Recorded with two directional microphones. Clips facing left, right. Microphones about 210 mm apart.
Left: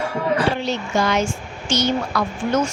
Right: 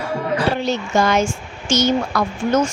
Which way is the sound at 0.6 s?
45° right (ahead or behind).